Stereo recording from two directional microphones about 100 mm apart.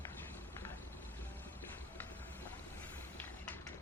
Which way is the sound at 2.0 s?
15° left (ahead or behind).